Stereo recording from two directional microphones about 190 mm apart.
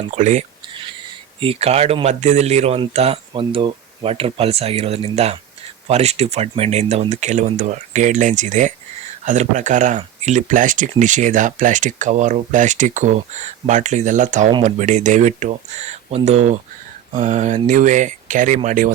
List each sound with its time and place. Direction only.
0.1 s speech: 40° right (ahead or behind)